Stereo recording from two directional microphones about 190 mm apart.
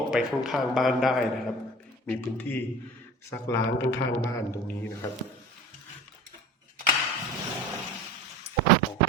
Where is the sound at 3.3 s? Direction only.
15° left (ahead or behind).